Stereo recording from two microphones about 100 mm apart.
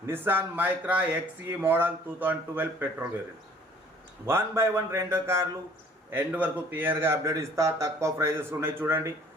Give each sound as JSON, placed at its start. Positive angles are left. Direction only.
{"t": 0.0, "sound": "speech", "side_deg": -20}
{"t": 4.3, "sound": "speech", "side_deg": -25}
{"t": 6.1, "sound": "speech", "side_deg": -15}